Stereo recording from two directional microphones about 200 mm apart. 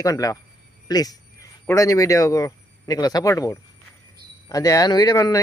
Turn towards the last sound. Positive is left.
turn(degrees=20)  # may be behind; listen again after turning